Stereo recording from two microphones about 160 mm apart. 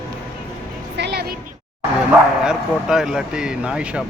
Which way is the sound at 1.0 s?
90° right.